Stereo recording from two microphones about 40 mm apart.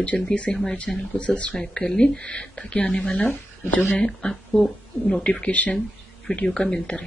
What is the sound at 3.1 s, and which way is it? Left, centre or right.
Speech, left.